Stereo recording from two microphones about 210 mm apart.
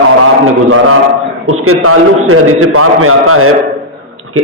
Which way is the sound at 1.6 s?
90° right.